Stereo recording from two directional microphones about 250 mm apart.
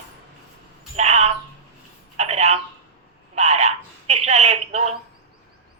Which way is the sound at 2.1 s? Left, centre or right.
Right.